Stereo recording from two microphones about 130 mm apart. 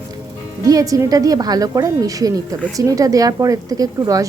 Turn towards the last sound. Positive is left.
turn(degrees=-25)  # may be behind; listen again after turning